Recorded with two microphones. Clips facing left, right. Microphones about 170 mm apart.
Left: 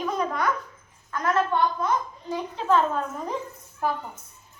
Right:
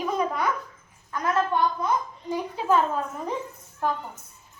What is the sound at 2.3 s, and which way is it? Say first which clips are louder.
Speech: even; 10° right (ahead or behind).